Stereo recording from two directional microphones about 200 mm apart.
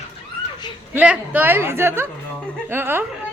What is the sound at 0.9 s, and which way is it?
A woman's voice, 5° right (ahead or behind).